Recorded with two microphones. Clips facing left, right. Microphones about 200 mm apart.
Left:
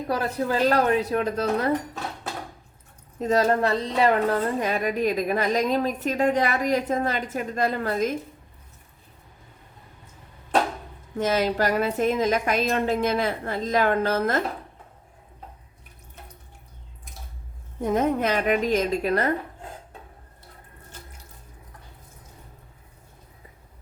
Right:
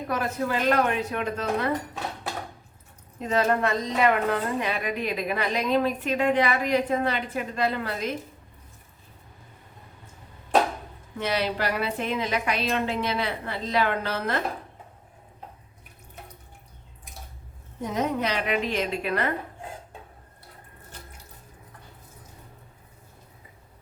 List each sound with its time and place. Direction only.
0.1 s speech: 35° left (ahead or behind)
3.2 s a woman's voice: 40° left (ahead or behind)
11.2 s a woman's voice: 45° left (ahead or behind)
17.8 s a woman's voice: 50° left (ahead or behind)